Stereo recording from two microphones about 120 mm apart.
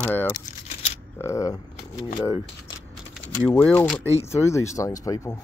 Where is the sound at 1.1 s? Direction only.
25° left (ahead or behind).